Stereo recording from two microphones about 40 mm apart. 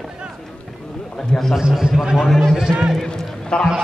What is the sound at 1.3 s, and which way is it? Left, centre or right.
Speech, centre.